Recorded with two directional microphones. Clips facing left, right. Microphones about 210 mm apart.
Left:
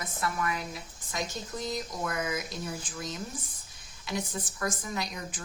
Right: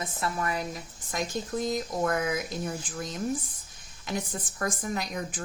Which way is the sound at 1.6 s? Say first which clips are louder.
Right 5 dB; 50° right (ahead or behind).